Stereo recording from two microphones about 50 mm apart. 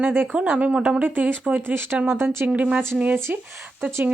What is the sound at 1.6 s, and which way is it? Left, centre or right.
Speech, right.